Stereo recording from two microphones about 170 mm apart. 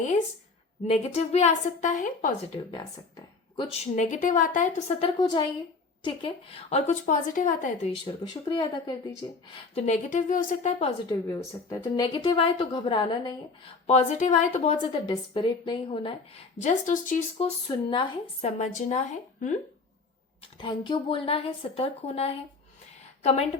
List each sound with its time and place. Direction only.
0.9 s a woman's voice: 40° left (ahead or behind)
2.7 s speech: 20° left (ahead or behind)
3.7 s a woman's voice: 45° left (ahead or behind)
5.0 s a woman's voice: 25° left (ahead or behind); by 7.7 s 45° left (ahead or behind)
8.0 s speech: 25° left (ahead or behind)
9.7 s a woman's voice: 40° left (ahead or behind)
11.1 s speech: 20° left (ahead or behind)
13.8 s a woman's voice: 40° left (ahead or behind)
14.8 s speech: 25° left (ahead or behind)
16.6 s a woman's voice: 45° left (ahead or behind)
17.3 s speech: 30° left (ahead or behind)
18.6 s a woman's voice: 45° left (ahead or behind)
20.6 s a woman's voice: 25° left (ahead or behind)